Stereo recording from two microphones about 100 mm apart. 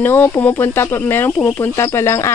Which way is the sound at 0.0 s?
25° left (ahead or behind).